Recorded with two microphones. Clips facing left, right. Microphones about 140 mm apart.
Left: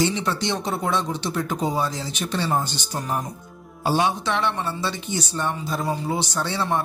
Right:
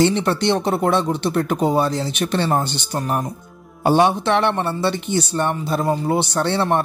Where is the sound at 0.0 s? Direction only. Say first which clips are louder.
Right 6 dB; 60° right (ahead or behind).